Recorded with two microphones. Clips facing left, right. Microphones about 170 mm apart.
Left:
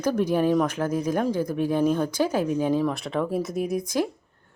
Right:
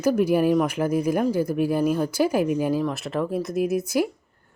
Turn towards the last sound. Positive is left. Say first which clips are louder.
# right 3 dB
turn(degrees=-10)  # may be behind; listen again after turning